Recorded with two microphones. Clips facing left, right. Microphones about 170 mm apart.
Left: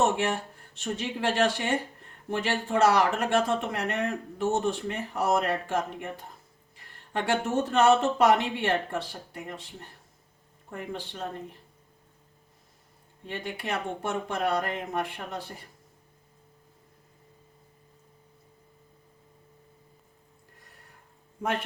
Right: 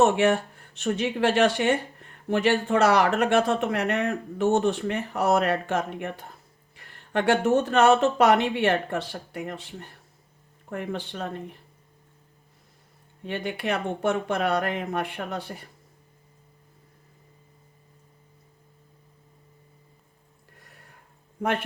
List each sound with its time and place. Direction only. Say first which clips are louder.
0.0 s speech: right 6 dB; 70° right (ahead or behind)
10.7 s speech: right 5 dB; 70° right (ahead or behind)
13.2 s speech: right 6 dB; 70° right (ahead or behind)